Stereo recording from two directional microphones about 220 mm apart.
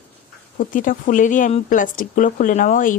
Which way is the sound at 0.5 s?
35° left (ahead or behind).